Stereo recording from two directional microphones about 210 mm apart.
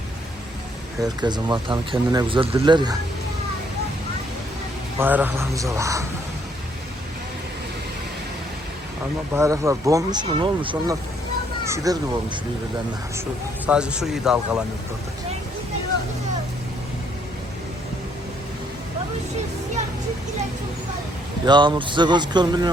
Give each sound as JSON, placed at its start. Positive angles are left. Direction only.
{"t": 1.0, "sound": "speech", "side_deg": -20}
{"t": 4.9, "sound": "speech", "side_deg": -10}
{"t": 9.3, "sound": "speech", "side_deg": -15}
{"t": 13.7, "sound": "speech", "side_deg": -5}
{"t": 21.4, "sound": "speech", "side_deg": -20}